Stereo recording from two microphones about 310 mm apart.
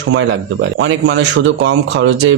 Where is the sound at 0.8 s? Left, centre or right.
Right.